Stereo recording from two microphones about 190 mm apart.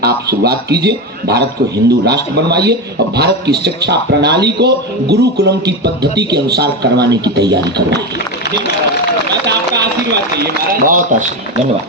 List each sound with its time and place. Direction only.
0.0 s a man's voice: 55° right (ahead or behind)
10.1 s speech: 50° right (ahead or behind)